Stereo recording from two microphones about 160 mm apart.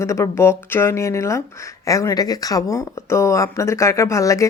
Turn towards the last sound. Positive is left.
turn(degrees=20)  # may be behind; listen again after turning